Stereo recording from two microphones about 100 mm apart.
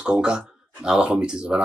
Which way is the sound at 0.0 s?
10° right (ahead or behind).